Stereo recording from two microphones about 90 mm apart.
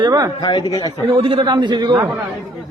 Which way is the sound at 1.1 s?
90° right.